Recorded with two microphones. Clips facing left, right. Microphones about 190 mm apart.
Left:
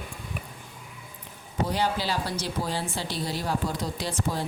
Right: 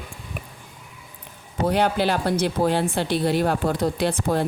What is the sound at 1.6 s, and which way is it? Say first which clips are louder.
Speech: right 7 dB; 60° right (ahead or behind).